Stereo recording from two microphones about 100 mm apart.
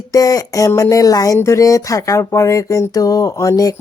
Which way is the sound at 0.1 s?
35° left (ahead or behind).